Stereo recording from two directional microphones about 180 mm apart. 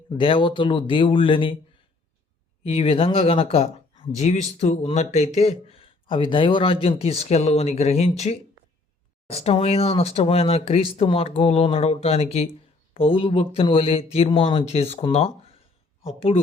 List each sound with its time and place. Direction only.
0.2 s speech: 30° left (ahead or behind)
2.6 s speech: 30° left (ahead or behind)